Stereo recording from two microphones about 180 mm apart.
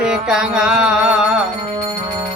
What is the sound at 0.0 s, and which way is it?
Music, 5° right (ahead or behind).